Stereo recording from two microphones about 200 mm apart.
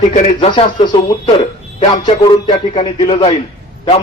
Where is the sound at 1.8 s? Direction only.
25° left (ahead or behind).